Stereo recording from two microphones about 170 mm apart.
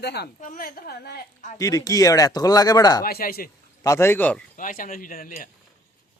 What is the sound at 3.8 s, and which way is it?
Speech, 15° left (ahead or behind).